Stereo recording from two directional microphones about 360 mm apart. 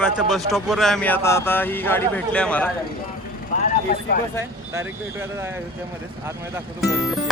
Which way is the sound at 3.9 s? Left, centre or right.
Left.